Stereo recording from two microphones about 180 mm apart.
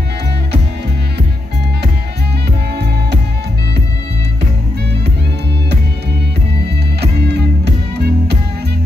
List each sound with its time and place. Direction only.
7.0 s music: 70° right (ahead or behind)